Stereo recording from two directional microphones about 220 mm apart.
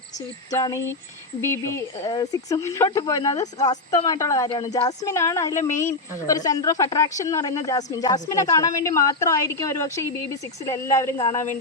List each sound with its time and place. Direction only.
0.5 s speech: 15° left (ahead or behind)